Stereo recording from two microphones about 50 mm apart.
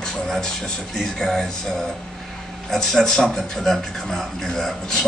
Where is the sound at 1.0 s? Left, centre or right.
Centre.